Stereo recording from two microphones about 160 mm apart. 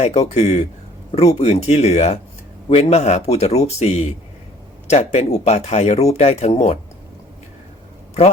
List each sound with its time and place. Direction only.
0.0 s speech: 40° left (ahead or behind)